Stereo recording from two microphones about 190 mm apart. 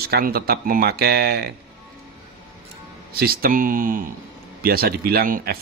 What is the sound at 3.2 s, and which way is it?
Speech, 50° right (ahead or behind).